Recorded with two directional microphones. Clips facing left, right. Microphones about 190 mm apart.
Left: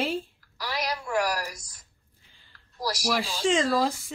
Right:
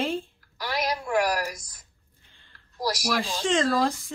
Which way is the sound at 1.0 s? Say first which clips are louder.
Right 2 dB; 15° right (ahead or behind).